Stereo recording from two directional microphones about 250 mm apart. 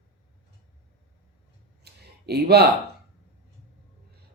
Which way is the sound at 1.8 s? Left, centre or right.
Right.